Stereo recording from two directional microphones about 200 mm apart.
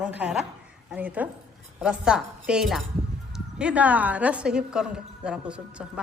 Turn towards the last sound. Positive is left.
turn(degrees=-5)  # may be behind; listen again after turning